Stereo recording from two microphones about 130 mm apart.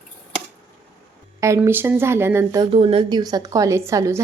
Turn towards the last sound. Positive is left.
turn(degrees=-25)  # may be behind; listen again after turning